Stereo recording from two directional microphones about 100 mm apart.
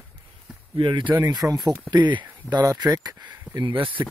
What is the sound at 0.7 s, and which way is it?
Speech, 55° right (ahead or behind).